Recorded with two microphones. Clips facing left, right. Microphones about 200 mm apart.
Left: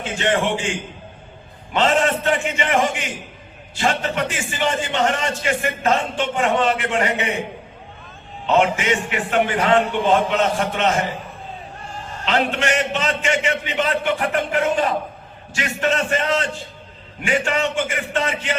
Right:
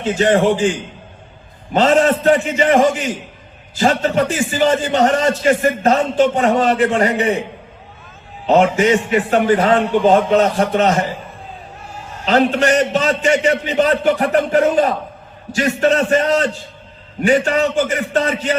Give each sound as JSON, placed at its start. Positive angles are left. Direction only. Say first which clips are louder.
{"t": 0.2, "sound": "a man's voice", "louder": "right 7 dB", "side_deg": -40}
{"t": 1.7, "sound": "a man's voice", "louder": "right 5 dB", "side_deg": -40}
{"t": 8.4, "sound": "a man's voice", "louder": "right 5 dB", "side_deg": -40}
{"t": 11.9, "sound": "music", "louder": "even", "side_deg": -10}
{"t": 12.2, "sound": "a man's voice", "louder": "right 7 dB", "side_deg": -40}